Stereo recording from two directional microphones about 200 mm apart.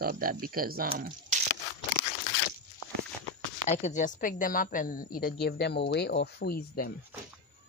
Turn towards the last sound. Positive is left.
turn(degrees=50)  # may be behind; listen again after turning